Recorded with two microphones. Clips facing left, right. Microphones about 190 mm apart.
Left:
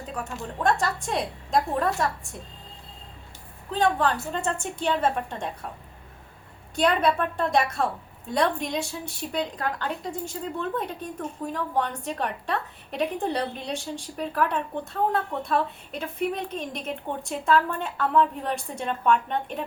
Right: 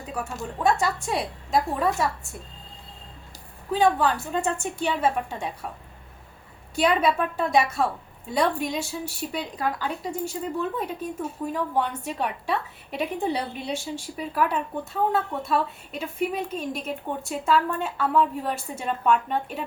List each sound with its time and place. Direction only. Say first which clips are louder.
0.6 s a woman's voice: right 1 dB; 5° right (ahead or behind)
3.7 s a woman's voice: right 2 dB; 5° right (ahead or behind)
6.7 s a woman's voice: right 1 dB; 5° right (ahead or behind)